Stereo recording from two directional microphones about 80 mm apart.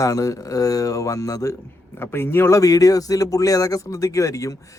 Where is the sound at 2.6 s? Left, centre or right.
Left.